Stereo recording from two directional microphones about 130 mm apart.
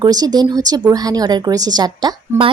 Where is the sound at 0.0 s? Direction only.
30° right (ahead or behind).